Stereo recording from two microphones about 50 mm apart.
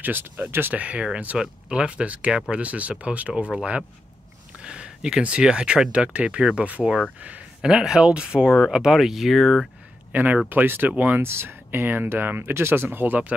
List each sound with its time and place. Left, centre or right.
0.0 s speech: right
0.7 s speech: right
4.6 s a sound: centre
5.4 s speech: centre
7.6 s speech: centre
10.1 s speech: right